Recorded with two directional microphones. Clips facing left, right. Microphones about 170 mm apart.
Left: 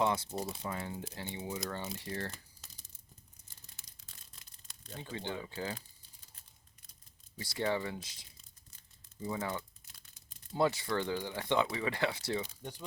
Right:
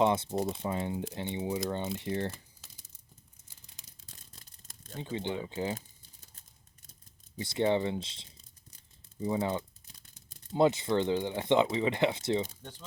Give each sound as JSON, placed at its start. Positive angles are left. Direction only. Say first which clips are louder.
{"t": 0.0, "sound": "speech", "louder": "right 5 dB", "side_deg": -25}
{"t": 4.0, "sound": "toothbrush", "louder": "right 5 dB", "side_deg": -40}
{"t": 4.9, "sound": "speech", "louder": "right 6 dB", "side_deg": -20}
{"t": 7.3, "sound": "speech", "louder": "right 6 dB", "side_deg": -20}